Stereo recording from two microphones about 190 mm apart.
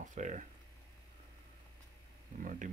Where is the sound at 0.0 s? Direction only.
40° right (ahead or behind).